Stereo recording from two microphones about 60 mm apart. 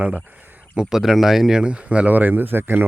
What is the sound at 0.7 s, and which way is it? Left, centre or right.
Speech, centre.